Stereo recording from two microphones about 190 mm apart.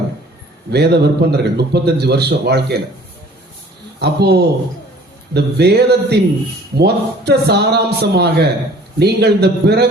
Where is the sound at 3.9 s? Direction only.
60° right (ahead or behind).